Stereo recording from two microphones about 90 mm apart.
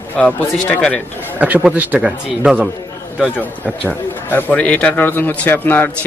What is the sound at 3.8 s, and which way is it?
A man's voice, 20° left (ahead or behind).